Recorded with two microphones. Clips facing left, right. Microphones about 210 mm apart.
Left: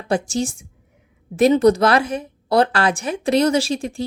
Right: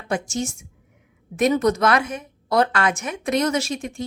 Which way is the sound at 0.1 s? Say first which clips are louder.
Left 4 dB; 35° left (ahead or behind).